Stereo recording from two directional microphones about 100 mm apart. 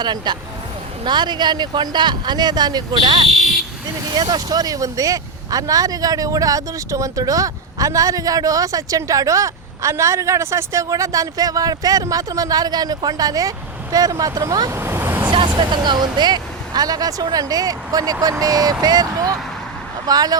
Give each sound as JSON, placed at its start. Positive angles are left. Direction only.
{"t": 0.0, "sound": "speech", "side_deg": -45}
{"t": 14.7, "sound": "vehicle", "side_deg": -25}
{"t": 15.3, "sound": "speech", "side_deg": -55}